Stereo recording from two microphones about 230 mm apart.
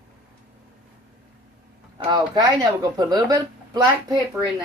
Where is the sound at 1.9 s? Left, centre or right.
Centre.